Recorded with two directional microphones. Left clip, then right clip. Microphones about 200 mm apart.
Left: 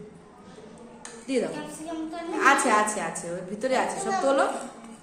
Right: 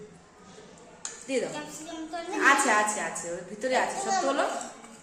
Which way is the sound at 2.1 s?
5° left (ahead or behind).